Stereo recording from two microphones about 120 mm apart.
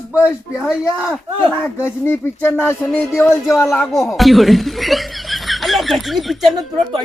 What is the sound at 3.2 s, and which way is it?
Speech, 25° left (ahead or behind).